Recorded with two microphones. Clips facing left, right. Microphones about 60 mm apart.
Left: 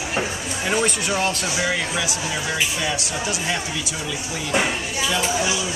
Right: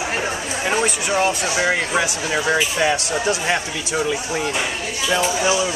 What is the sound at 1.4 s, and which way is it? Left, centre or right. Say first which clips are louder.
Speech: right 4 dB; right.